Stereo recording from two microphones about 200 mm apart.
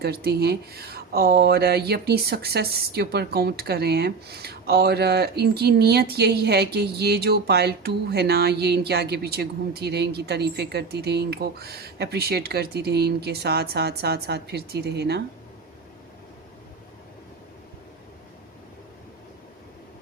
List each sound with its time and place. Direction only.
0.0 s speech: 50° right (ahead or behind)